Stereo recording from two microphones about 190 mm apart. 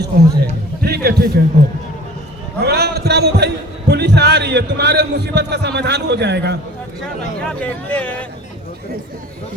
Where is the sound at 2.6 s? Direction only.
60° right (ahead or behind).